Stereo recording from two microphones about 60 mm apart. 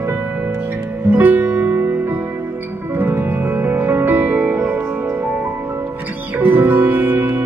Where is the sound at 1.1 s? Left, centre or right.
Right.